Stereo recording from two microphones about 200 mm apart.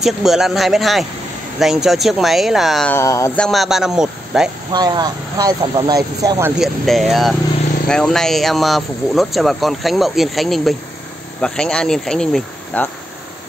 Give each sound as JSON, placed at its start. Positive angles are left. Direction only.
{"t": 0.0, "sound": "speech", "side_deg": 0}
{"t": 3.0, "sound": "speech", "side_deg": 15}
{"t": 3.3, "sound": "speech", "side_deg": 0}
{"t": 4.7, "sound": "speech", "side_deg": -20}
{"t": 6.6, "sound": "speech", "side_deg": 0}